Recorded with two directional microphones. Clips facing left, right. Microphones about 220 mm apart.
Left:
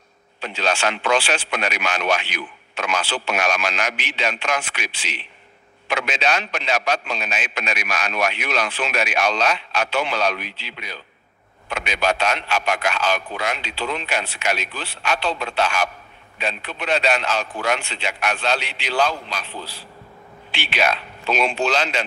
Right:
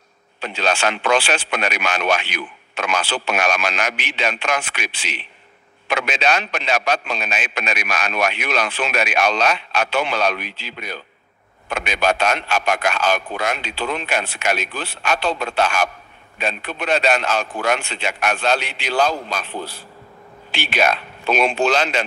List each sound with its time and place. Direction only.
0.4 s a man's voice: 55° right (ahead or behind)